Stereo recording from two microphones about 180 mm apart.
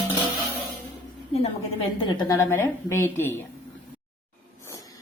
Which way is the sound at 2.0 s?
20° left (ahead or behind).